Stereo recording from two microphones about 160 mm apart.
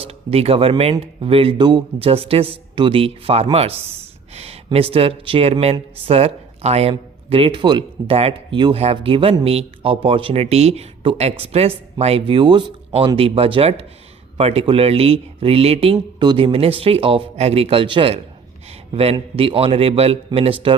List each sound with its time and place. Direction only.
0.0 s speech: 40° right (ahead or behind)